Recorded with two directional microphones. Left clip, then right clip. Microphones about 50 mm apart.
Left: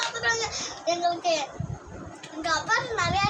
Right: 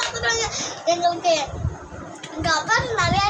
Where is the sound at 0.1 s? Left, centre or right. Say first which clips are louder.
Right 4 dB; centre.